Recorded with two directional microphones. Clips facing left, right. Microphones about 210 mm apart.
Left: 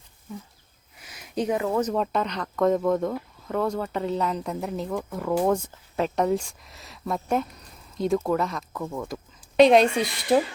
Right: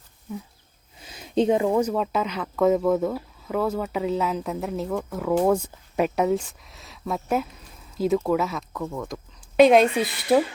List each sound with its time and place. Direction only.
0.9 s a sound: 25° right (ahead or behind)
1.6 s speech: 10° right (ahead or behind)
8.9 s speech: 10° left (ahead or behind)
9.6 s speech: 5° right (ahead or behind)